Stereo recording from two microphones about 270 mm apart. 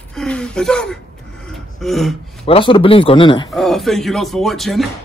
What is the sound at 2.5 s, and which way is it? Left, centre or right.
Speech, centre.